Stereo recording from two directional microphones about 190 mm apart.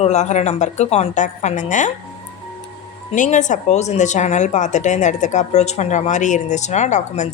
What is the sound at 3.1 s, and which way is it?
A woman's voice, 40° left (ahead or behind).